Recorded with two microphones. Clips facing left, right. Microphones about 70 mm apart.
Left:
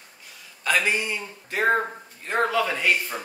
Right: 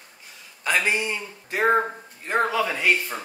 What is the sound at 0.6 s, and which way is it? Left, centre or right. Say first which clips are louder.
A man's voice: even; right.